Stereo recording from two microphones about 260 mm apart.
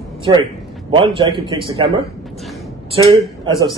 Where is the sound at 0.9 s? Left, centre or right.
Centre.